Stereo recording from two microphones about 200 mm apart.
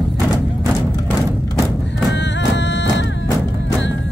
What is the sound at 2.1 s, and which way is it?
Music, 60° left (ahead or behind).